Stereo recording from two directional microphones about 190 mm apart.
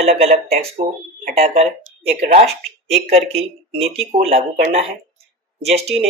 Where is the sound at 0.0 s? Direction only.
35° right (ahead or behind).